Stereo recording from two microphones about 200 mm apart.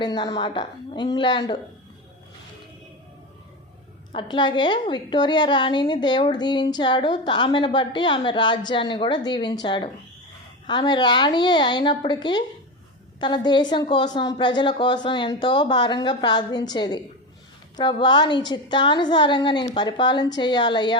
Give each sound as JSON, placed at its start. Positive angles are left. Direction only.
{"t": 0.0, "sound": "a woman's voice", "side_deg": 20}
{"t": 4.1, "sound": "a woman's voice", "side_deg": 25}